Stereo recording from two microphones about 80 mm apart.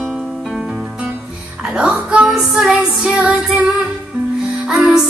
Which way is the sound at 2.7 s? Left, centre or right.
Centre.